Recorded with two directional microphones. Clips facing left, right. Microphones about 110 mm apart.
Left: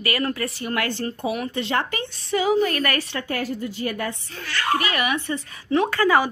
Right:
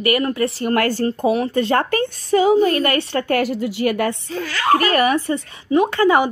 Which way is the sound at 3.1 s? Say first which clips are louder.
Right 8 dB; 65° right (ahead or behind).